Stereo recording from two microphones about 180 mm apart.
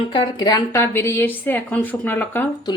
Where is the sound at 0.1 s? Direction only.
25° left (ahead or behind).